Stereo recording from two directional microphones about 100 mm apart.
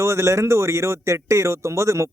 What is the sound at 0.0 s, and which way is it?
A man's voice, 30° right (ahead or behind).